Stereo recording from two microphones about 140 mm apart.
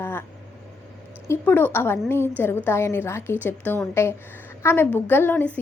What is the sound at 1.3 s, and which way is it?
A woman's voice, 15° left (ahead or behind).